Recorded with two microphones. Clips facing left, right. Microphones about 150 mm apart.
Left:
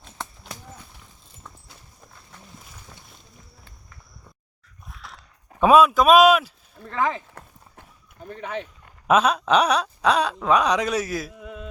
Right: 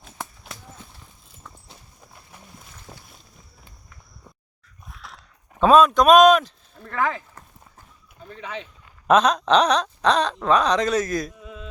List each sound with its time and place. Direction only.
0.0 s clip-clop: 5° right (ahead or behind)
4.9 s dog: centre (ahead or behind)
5.5 s speech: 10° left (ahead or behind)
6.8 s speech: 20° left (ahead or behind)
8.2 s speech: 50° left (ahead or behind)
9.0 s speech: 5° left (ahead or behind)
11.3 s a sound: 60° left (ahead or behind)